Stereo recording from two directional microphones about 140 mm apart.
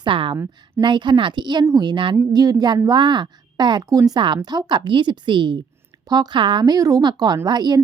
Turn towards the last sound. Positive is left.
turn(degrees=-30)  # may be behind; listen again after turning